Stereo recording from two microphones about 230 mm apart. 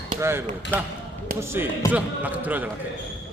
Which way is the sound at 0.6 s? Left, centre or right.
Left.